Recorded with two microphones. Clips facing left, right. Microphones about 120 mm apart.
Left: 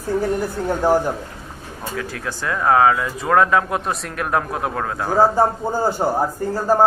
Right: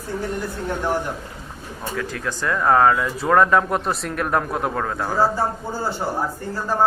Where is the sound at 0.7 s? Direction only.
35° left (ahead or behind).